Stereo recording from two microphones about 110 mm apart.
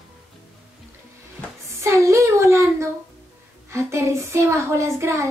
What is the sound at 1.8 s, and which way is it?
Speech, 25° right (ahead or behind).